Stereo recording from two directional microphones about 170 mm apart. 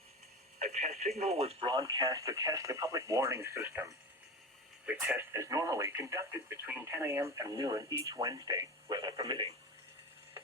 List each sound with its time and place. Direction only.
0.6 s speech: 45° right (ahead or behind)
1.8 s speech: 20° right (ahead or behind)